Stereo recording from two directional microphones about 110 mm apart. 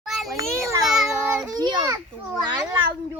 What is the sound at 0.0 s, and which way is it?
Children playing, centre (ahead or behind).